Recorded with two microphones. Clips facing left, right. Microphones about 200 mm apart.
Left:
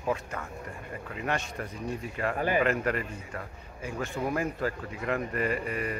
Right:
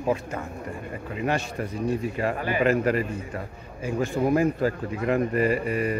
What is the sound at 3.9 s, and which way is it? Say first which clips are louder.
A man's voice: right 8 dB; 25° right (ahead or behind).